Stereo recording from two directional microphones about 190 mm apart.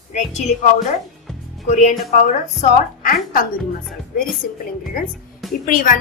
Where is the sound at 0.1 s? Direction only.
35° left (ahead or behind).